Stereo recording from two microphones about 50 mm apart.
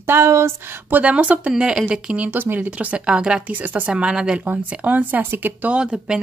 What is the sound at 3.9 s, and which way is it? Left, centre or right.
Speech, centre.